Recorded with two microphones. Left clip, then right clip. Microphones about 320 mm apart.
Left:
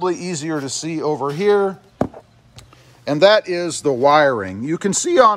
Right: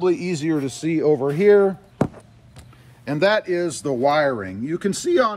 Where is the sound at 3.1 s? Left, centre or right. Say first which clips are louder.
Left 6 dB; centre.